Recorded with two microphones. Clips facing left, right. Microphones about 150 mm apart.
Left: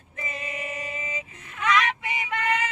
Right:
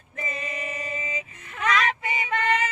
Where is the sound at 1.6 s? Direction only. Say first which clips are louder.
Even; 35° right (ahead or behind).